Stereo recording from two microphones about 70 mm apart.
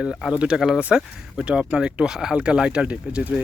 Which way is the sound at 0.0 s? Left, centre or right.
Centre.